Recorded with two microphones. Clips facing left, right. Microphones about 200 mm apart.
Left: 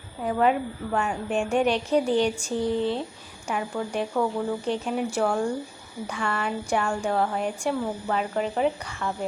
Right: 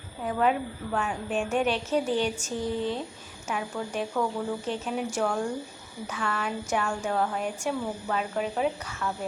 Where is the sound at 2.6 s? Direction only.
10° right (ahead or behind).